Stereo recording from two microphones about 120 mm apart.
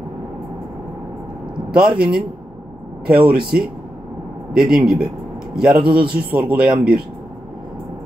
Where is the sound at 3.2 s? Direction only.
10° right (ahead or behind).